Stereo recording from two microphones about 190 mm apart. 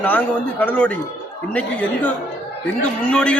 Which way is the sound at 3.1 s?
5° left (ahead or behind).